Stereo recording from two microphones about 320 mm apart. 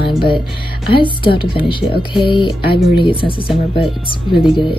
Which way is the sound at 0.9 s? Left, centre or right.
Centre.